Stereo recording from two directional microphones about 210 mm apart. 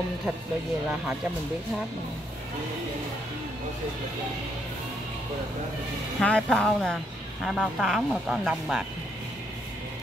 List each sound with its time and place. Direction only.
6.1 s speech: 5° left (ahead or behind)